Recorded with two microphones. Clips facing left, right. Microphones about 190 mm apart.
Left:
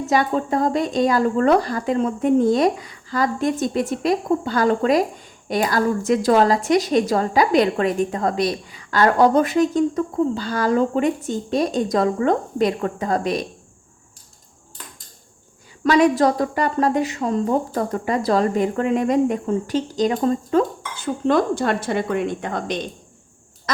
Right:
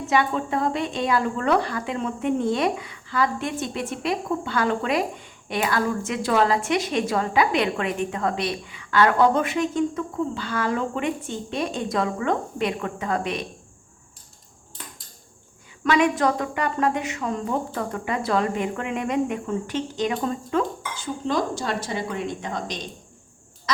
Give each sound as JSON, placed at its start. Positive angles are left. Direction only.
{"t": 0.1, "sound": "a woman's voice", "side_deg": 40}
{"t": 15.8, "sound": "a woman's voice", "side_deg": 35}
{"t": 21.0, "sound": "a woman's voice", "side_deg": 60}
{"t": 23.7, "sound": "a sound", "side_deg": 50}